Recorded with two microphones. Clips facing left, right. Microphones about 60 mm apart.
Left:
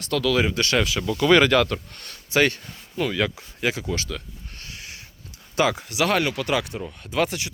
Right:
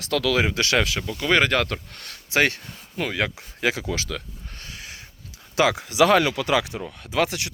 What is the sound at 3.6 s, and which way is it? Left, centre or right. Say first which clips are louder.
Speech: right 1 dB; right.